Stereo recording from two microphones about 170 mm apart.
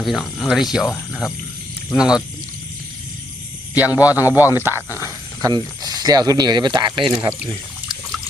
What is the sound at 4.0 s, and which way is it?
Speech, 10° right (ahead or behind).